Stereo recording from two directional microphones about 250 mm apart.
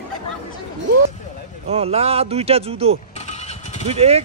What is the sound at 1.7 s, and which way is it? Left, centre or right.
Speech, right.